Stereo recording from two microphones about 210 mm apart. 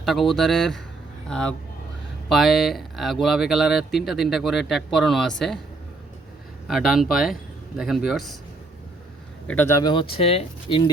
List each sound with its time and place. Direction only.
0.0 s speech: centre (ahead or behind)
6.7 s speech: centre (ahead or behind)
9.5 s speech: 10° left (ahead or behind); by 10.8 s 25° left (ahead or behind)